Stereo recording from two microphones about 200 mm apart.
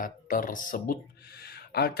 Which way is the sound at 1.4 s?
50° left (ahead or behind).